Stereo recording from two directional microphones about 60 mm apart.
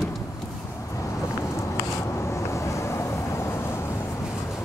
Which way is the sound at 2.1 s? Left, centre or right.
Left.